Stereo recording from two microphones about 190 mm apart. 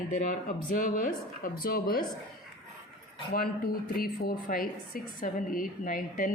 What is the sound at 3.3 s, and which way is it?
A woman's voice, 50° left (ahead or behind).